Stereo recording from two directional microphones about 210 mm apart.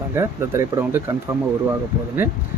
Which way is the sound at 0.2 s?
10° right (ahead or behind).